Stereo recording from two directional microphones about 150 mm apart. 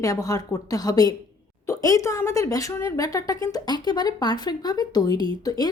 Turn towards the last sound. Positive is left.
turn(degrees=25)  # may be behind; listen again after turning